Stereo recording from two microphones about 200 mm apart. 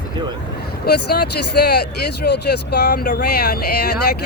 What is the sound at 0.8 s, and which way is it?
Speech, 50° left (ahead or behind).